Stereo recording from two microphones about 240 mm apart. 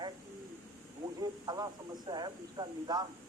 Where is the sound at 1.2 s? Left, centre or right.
Centre.